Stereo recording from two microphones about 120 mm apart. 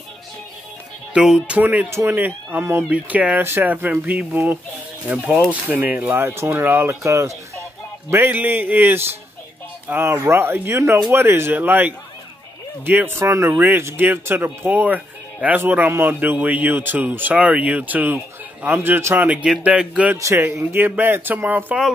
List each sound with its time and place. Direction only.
1.1 s speech: 5° right (ahead or behind)
20.2 s speech: 20° right (ahead or behind)